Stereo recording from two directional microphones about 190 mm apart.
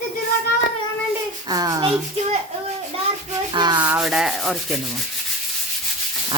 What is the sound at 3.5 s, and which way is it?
Rub, 20° right (ahead or behind).